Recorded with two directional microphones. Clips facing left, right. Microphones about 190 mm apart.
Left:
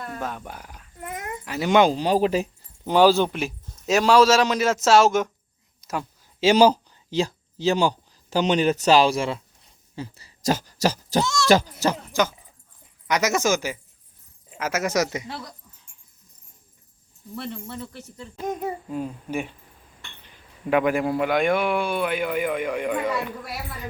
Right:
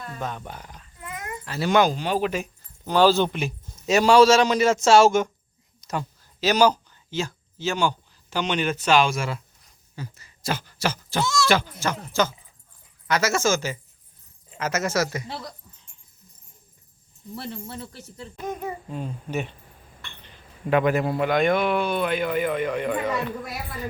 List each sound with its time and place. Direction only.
0.2 s speech: 5° left (ahead or behind)
0.9 s dog: 50° left (ahead or behind)
1.5 s speech: 15° left (ahead or behind); by 2.6 s 35° left (ahead or behind)
2.8 s a man's voice: 15° left (ahead or behind)
5.8 s a sound: 5° left (ahead or behind)
6.4 s speech: 30° left (ahead or behind)
13.1 s speech: 15° left (ahead or behind)
17.4 s speech: 30° right (ahead or behind)
18.9 s speech: 10° left (ahead or behind)